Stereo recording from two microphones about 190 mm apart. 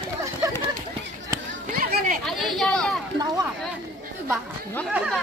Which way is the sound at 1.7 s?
45° right (ahead or behind).